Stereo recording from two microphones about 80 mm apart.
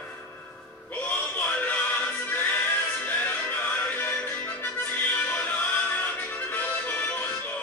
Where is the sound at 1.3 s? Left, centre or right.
Centre.